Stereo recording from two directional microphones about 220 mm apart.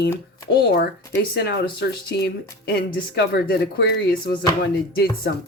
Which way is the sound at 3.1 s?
50° left (ahead or behind).